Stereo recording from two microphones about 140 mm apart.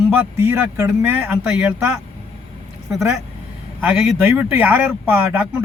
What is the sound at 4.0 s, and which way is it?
Speech, 10° right (ahead or behind).